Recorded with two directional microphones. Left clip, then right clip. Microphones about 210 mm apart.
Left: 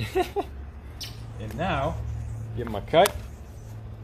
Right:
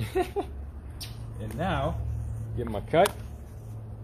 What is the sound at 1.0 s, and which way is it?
Speech, 45° right (ahead or behind).